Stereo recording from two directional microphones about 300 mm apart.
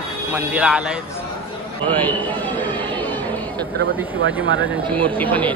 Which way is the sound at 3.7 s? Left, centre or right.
Right.